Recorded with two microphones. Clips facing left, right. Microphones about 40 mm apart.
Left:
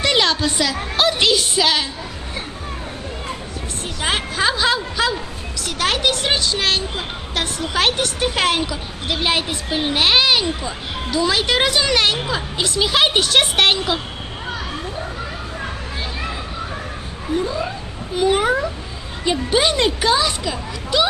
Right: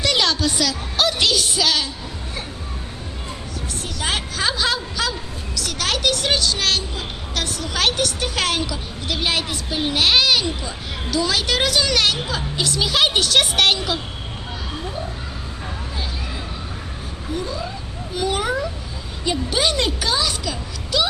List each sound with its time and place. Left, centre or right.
0.0 s a woman's voice: left
4.0 s speech: left
9.7 s speech: centre
18.1 s a child's voice: left